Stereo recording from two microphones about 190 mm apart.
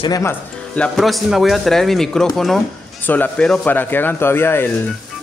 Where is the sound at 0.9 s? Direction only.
Centre (ahead or behind).